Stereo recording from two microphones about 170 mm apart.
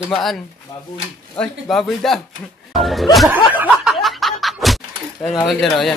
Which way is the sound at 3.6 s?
5° right (ahead or behind).